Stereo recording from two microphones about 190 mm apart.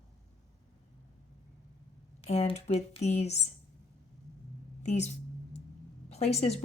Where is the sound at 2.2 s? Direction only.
30° left (ahead or behind).